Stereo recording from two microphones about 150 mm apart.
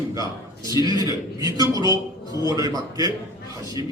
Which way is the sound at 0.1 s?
20° right (ahead or behind).